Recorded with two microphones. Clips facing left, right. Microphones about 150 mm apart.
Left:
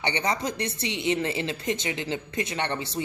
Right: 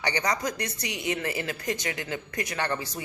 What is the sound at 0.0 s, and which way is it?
Speech, 25° left (ahead or behind).